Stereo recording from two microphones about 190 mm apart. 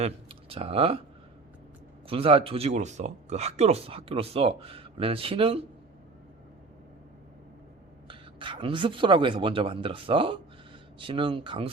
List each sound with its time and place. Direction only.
0.0 s speech: 30° right (ahead or behind)
2.0 s speech: 30° right (ahead or behind)
8.0 s speech: 25° right (ahead or behind)